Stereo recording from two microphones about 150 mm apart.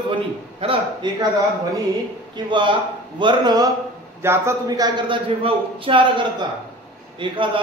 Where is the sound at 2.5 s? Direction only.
30° right (ahead or behind).